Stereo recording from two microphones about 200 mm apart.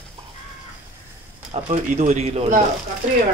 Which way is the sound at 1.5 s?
35° right (ahead or behind).